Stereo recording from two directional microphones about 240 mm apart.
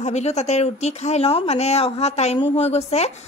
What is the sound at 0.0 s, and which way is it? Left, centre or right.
Speech, left.